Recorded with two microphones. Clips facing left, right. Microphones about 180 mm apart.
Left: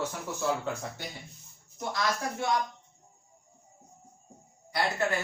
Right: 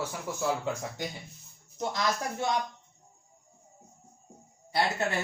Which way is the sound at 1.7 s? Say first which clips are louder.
Right 1 dB; 20° right (ahead or behind).